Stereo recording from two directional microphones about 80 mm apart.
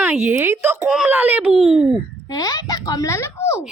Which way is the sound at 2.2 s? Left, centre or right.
Left.